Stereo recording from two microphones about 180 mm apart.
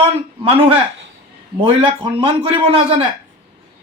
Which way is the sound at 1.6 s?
30° right (ahead or behind).